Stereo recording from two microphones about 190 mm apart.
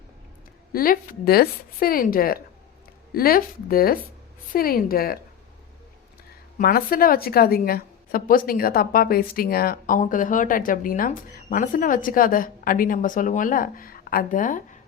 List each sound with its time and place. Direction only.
0.7 s a woman's voice: 50° left (ahead or behind)
6.6 s a woman's voice: 50° left (ahead or behind)